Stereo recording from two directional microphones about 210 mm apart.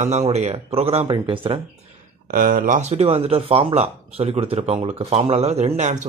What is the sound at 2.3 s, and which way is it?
Speech, 40° right (ahead or behind).